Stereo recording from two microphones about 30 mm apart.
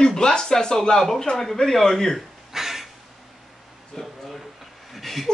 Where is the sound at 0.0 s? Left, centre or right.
Left.